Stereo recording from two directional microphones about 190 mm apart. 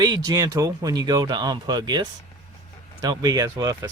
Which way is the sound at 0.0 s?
20° right (ahead or behind).